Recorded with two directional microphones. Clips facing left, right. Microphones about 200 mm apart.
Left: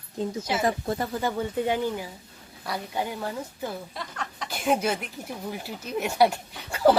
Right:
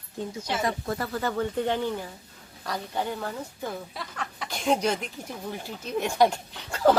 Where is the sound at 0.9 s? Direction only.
15° left (ahead or behind).